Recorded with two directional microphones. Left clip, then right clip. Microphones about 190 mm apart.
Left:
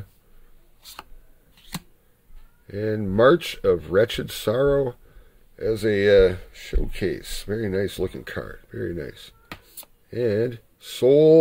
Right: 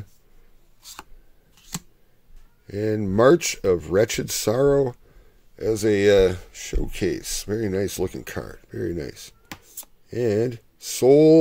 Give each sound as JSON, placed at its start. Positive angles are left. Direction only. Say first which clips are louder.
{"t": 2.6, "sound": "speech", "louder": "right 2 dB", "side_deg": -40}